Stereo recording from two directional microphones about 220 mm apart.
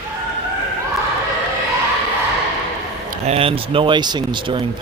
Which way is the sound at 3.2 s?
25° right (ahead or behind).